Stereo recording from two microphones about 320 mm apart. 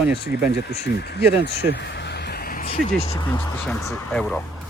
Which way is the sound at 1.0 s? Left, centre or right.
Left.